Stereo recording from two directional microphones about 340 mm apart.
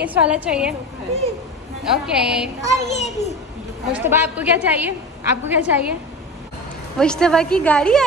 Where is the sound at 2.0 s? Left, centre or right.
Centre.